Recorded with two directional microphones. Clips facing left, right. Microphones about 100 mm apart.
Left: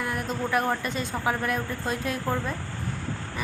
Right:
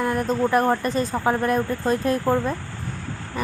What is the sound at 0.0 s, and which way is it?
Speech, 40° right (ahead or behind).